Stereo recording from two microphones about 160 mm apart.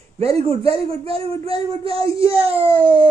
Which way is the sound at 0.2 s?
35° right (ahead or behind).